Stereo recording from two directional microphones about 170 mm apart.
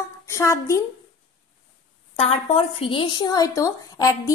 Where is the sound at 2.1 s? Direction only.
35° left (ahead or behind).